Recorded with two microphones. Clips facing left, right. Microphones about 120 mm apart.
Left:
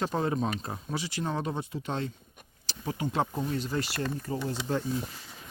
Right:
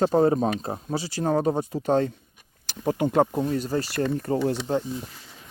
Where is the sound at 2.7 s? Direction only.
55° right (ahead or behind).